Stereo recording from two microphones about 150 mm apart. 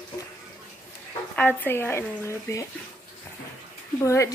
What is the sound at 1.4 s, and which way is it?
A woman's voice, 15° left (ahead or behind).